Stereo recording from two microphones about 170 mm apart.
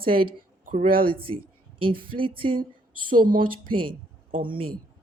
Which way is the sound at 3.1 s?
55° right (ahead or behind).